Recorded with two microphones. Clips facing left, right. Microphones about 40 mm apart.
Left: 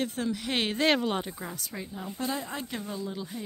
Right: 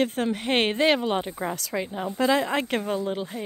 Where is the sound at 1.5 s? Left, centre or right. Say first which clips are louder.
Right 9 dB; right.